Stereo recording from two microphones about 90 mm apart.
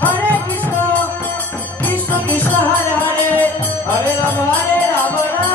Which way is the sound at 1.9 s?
20° left (ahead or behind).